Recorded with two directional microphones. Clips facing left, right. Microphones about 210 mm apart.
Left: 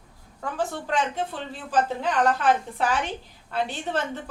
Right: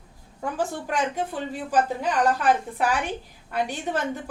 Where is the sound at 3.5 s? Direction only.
15° right (ahead or behind).